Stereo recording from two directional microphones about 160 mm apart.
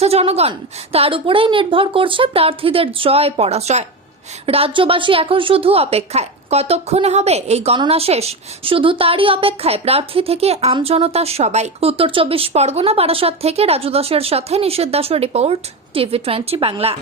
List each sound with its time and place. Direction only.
0.0 s a woman's voice: 40° right (ahead or behind)